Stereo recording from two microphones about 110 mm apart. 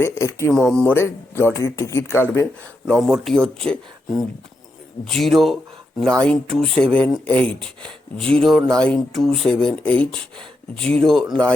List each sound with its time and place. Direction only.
0.0 s speech: 25° left (ahead or behind)
0.5 s speech: 5° left (ahead or behind)
0.9 s speech: 20° left (ahead or behind)
2.8 s speech: 5° left (ahead or behind)
5.0 s speech: 5° left (ahead or behind)